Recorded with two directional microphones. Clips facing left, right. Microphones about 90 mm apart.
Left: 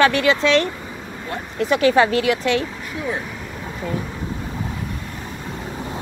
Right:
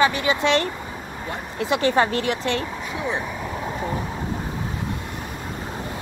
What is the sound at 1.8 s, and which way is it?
Speech, 40° right (ahead or behind).